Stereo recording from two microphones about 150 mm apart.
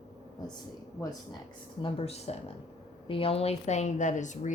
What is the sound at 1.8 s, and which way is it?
A woman's voice, 40° left (ahead or behind).